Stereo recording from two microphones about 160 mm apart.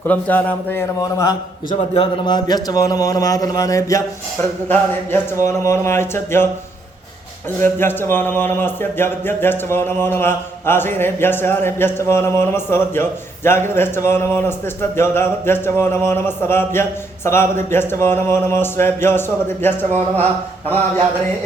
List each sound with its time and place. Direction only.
0.1 s speech: 10° left (ahead or behind)
1.9 s a man's voice: 35° left (ahead or behind); by 6.5 s 15° left (ahead or behind)
7.6 s speech: 15° left (ahead or behind)